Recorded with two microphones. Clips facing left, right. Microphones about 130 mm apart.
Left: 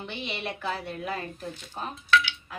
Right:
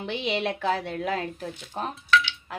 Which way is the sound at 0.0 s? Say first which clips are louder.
Right 7 dB; 90° right.